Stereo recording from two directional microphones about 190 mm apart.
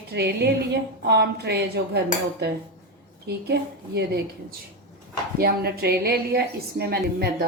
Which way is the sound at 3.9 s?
60° right (ahead or behind).